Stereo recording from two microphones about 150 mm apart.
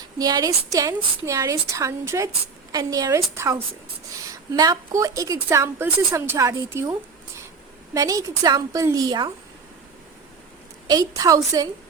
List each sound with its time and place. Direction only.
0.2 s a woman's voice: 25° right (ahead or behind)
7.9 s a woman's voice: 25° right (ahead or behind)
10.8 s a woman's voice: 25° right (ahead or behind)